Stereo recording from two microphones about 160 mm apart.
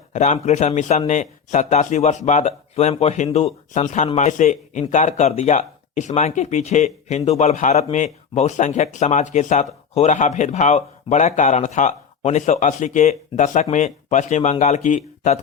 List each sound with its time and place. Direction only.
0.1 s a man's voice: 45° left (ahead or behind)